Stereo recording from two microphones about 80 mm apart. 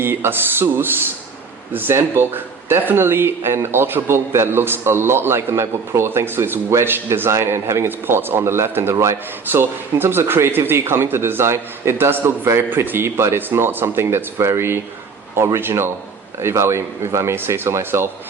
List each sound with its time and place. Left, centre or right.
0.0 s speech: right